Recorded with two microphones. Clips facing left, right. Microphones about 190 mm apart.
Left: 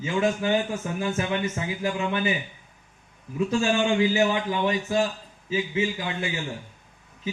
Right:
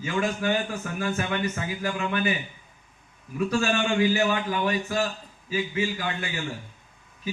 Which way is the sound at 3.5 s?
20° left (ahead or behind).